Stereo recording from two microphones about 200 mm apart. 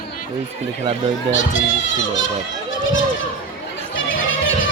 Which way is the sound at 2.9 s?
70° left (ahead or behind).